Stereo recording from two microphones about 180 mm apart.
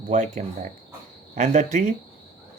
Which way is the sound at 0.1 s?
45° right (ahead or behind).